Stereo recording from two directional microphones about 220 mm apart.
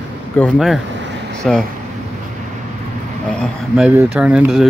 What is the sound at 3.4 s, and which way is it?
Speech, 5° right (ahead or behind).